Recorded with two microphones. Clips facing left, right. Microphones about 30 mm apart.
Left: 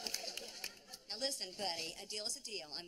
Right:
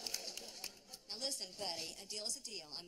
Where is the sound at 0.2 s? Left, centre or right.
Left.